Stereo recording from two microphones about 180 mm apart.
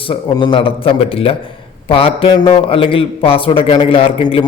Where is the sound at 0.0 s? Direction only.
25° left (ahead or behind).